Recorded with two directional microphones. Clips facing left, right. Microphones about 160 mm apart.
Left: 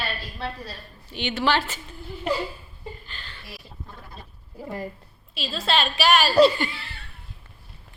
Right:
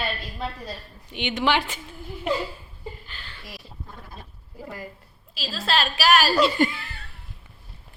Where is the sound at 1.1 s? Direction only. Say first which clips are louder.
Even; 15° right (ahead or behind).